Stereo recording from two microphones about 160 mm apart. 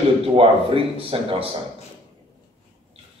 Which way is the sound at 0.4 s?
35° right (ahead or behind).